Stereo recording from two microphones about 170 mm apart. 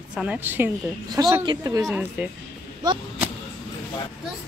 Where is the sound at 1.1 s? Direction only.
20° right (ahead or behind).